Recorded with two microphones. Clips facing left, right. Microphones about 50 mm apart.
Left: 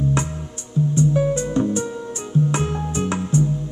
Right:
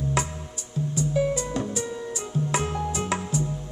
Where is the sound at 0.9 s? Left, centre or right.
Left.